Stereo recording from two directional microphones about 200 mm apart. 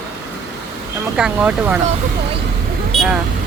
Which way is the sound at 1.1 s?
5° right (ahead or behind).